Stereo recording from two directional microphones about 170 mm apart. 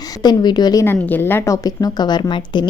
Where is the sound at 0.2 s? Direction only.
25° left (ahead or behind).